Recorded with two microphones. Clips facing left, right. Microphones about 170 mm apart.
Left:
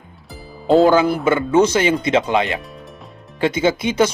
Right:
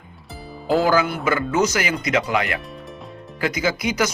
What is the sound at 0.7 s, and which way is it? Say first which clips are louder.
Speech: left 6 dB; 25° left (ahead or behind).